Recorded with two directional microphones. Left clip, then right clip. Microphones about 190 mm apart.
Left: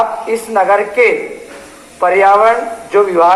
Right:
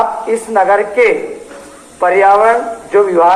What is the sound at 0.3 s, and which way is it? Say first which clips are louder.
A man's voice: right 1 dB; 40° right (ahead or behind).